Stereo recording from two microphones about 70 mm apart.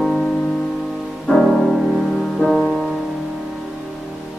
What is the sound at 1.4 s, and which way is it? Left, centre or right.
Music, centre.